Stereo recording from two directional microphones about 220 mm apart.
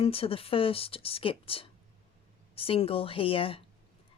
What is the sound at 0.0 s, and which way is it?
A woman's voice, 25° left (ahead or behind).